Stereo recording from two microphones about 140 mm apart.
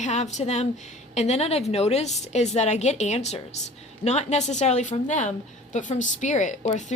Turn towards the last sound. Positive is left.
turn(degrees=60)  # may be behind; listen again after turning